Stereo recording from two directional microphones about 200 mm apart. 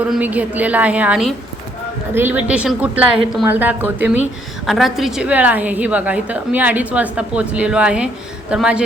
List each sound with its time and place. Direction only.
0.1 s a woman's voice: 10° right (ahead or behind)